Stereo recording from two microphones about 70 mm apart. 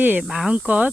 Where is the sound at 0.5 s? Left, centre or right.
Centre.